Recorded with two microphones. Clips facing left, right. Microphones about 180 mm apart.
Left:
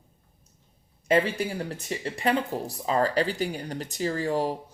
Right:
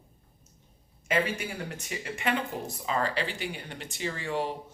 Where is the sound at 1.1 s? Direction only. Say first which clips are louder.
Left 5 dB; 35° left (ahead or behind).